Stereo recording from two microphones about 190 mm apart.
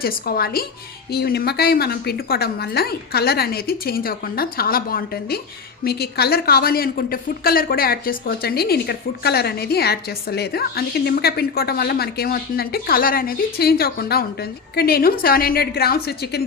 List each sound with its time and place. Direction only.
0.0 s a woman's voice: 55° left (ahead or behind)